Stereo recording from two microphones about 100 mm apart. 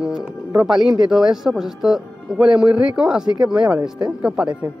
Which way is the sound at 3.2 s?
45° right (ahead or behind).